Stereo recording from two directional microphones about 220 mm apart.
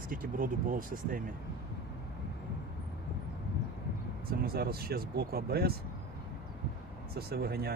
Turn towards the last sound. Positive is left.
turn(degrees=-45)  # may be behind; listen again after turning